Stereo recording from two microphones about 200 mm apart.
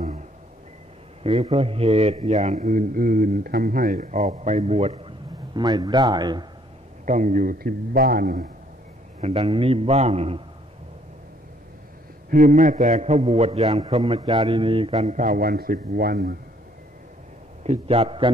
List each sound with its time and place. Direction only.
1.2 s a man's voice: 30° right (ahead or behind)
7.1 s a man's voice: 40° right (ahead or behind)
9.2 s a man's voice: 30° right (ahead or behind)
12.3 s a man's voice: 40° right (ahead or behind)
17.6 s a man's voice: 30° right (ahead or behind)